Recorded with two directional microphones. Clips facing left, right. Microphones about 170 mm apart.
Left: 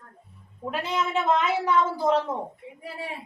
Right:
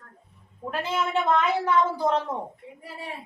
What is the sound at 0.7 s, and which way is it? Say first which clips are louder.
A woman's voice: even; centre (ahead or behind).